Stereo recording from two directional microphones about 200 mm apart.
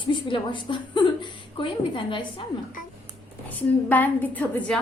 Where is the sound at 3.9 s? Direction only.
10° left (ahead or behind).